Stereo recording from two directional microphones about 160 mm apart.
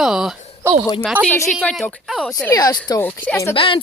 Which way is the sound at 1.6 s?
Centre (ahead or behind).